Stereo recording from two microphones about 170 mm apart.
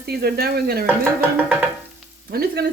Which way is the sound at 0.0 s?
70° right (ahead or behind).